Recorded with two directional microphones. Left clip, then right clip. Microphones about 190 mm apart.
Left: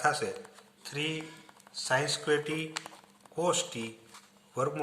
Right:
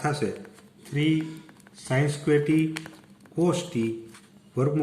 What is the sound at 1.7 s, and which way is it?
Speech, 25° left (ahead or behind).